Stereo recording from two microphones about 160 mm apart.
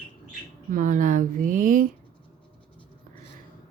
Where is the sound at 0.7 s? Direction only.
55° right (ahead or behind).